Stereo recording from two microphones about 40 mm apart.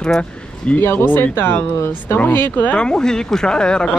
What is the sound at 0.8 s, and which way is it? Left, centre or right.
Speech, left.